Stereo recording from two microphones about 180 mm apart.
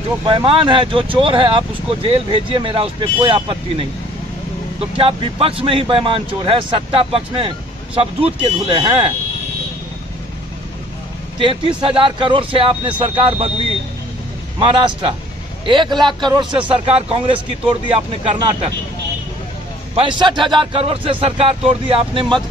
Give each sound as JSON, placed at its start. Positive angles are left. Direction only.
{"t": 0.2, "sound": "speech", "side_deg": -30}
{"t": 11.3, "sound": "speech", "side_deg": -30}
{"t": 14.6, "sound": "speech", "side_deg": -30}
{"t": 20.0, "sound": "speech", "side_deg": -25}